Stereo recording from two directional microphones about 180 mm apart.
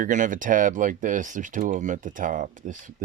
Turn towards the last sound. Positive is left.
turn(degrees=-45)  # may be behind; listen again after turning